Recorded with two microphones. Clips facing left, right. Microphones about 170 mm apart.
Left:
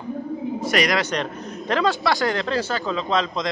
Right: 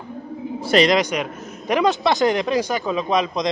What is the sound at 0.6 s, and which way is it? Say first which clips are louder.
Speech: right 6 dB; 30° right (ahead or behind).